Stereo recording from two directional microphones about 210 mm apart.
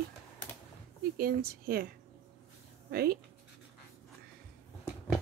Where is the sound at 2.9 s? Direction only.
45° right (ahead or behind).